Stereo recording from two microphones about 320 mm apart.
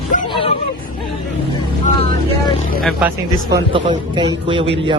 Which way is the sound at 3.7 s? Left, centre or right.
Centre.